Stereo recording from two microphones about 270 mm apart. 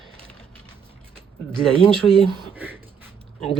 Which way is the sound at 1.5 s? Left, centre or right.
Centre.